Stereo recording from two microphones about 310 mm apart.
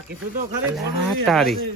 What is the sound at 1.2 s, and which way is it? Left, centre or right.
Speech, centre.